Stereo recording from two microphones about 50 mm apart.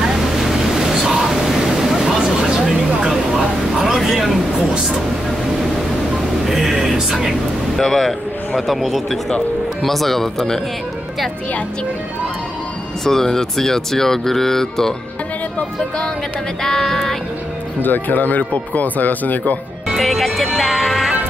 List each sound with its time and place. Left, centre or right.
0.0 s waves: centre
3.0 s a sound: centre
6.4 s music: centre
7.7 s music: centre
8.5 s speech: centre
13.0 s speech: centre
16.6 s speech: centre
17.8 s speech: left
19.9 s music: centre